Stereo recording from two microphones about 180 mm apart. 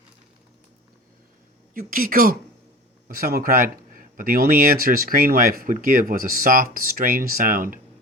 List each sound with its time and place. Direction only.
1.7 s speech: 50° right (ahead or behind)